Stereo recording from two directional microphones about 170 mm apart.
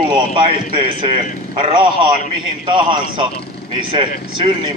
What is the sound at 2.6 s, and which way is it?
A man's voice, 30° right (ahead or behind).